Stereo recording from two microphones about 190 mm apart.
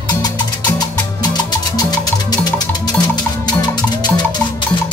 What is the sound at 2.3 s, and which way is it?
Music, 20° left (ahead or behind).